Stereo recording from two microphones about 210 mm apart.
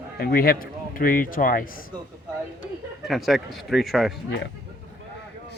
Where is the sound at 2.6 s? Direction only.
Centre (ahead or behind).